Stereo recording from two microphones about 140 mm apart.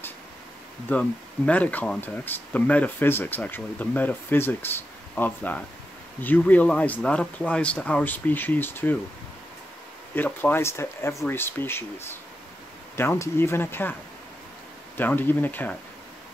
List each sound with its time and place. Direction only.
0.8 s speech: 10° left (ahead or behind)
10.1 s speech: 15° left (ahead or behind)
15.0 s speech: 15° left (ahead or behind)